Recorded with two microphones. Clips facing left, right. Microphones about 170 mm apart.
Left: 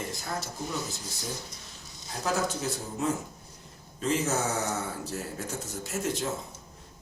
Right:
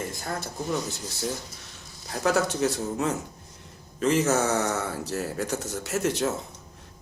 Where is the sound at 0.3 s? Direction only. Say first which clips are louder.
Right 6 dB; 60° right (ahead or behind).